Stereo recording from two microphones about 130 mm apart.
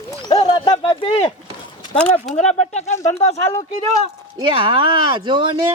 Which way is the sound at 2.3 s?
60° left (ahead or behind).